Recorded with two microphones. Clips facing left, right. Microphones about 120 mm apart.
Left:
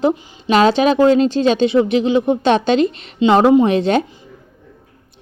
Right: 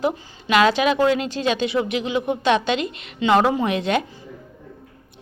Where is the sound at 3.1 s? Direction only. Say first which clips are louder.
Left 7 dB; 25° left (ahead or behind).